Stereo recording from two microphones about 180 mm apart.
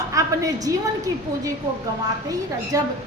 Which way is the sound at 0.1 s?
20° right (ahead or behind).